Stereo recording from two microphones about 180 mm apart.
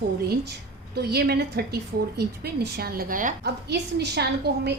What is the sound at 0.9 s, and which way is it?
A woman's voice, 65° right (ahead or behind).